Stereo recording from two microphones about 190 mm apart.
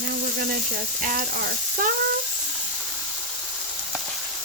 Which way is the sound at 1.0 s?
45° right (ahead or behind).